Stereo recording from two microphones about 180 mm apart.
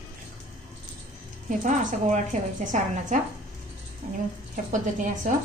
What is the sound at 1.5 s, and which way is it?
A woman's voice, 40° right (ahead or behind).